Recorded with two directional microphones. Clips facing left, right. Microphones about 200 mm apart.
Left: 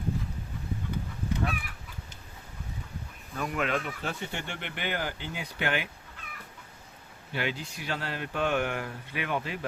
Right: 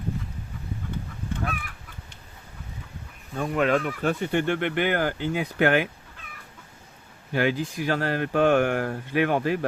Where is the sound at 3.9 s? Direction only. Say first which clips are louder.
Right 10 dB; 55° right (ahead or behind).